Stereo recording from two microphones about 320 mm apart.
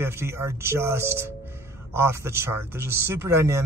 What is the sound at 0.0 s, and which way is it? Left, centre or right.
Speech, centre.